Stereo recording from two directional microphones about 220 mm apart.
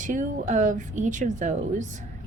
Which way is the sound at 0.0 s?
35° right (ahead or behind).